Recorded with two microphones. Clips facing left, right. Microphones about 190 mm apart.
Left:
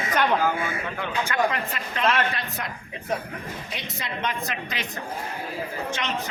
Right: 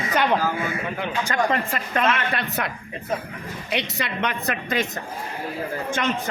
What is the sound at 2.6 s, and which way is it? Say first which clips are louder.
A woman's voice: right 6 dB; 70° right (ahead or behind).